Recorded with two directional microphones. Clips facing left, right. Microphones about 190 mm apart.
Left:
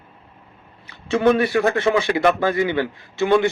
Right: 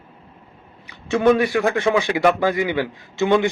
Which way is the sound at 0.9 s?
15° right (ahead or behind).